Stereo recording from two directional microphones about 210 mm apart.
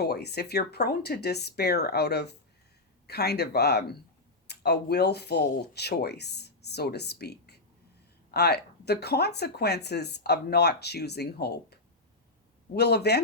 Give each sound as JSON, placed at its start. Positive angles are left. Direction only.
{"t": 0.0, "sound": "speech", "side_deg": 50}